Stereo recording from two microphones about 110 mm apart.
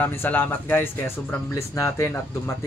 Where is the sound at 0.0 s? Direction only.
20° left (ahead or behind).